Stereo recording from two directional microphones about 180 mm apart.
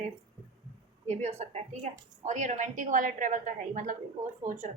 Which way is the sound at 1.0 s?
40° right (ahead or behind).